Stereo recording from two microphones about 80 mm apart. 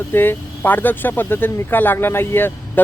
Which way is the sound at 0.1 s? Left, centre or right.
Left.